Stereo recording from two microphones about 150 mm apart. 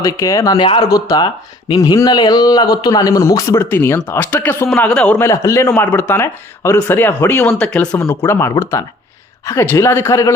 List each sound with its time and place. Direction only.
0.0 s speech: 20° left (ahead or behind)